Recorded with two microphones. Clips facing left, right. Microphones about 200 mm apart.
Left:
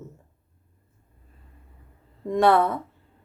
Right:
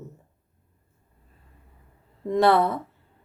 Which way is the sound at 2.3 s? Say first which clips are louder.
Even; centre (ahead or behind).